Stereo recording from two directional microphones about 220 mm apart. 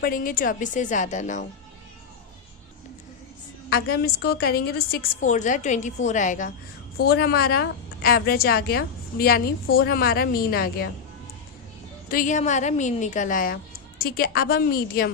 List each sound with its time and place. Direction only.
0.0 s a woman's voice: 40° left (ahead or behind)
3.7 s a woman's voice: 45° left (ahead or behind)
7.0 s a woman's voice: 45° left (ahead or behind)
12.0 s a woman's voice: 40° left (ahead or behind)